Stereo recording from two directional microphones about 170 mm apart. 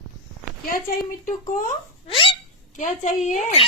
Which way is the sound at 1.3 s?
50° left (ahead or behind).